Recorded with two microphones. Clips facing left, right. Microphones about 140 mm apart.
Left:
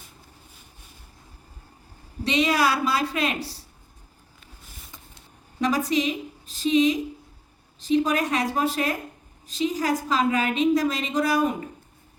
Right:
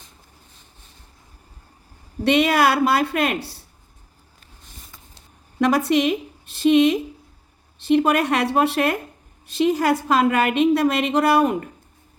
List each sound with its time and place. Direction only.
2.2 s a woman's voice: 60° right (ahead or behind)
5.5 s a woman's voice: 65° right (ahead or behind)